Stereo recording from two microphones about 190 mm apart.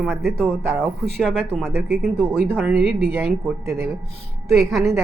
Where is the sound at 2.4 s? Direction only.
10° right (ahead or behind).